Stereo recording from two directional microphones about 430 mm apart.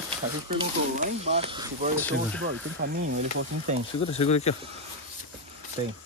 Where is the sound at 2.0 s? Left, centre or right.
Centre.